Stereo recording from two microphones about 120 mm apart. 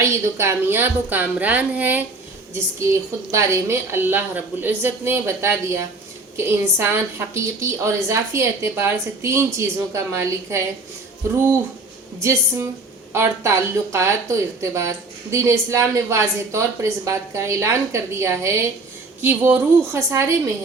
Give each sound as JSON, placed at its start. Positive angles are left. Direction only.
{"t": 0.0, "sound": "a woman's voice", "side_deg": -20}
{"t": 2.7, "sound": "speech", "side_deg": -25}
{"t": 12.2, "sound": "speech", "side_deg": -20}